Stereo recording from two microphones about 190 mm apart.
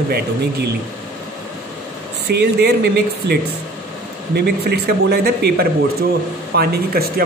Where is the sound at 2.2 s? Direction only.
60° right (ahead or behind).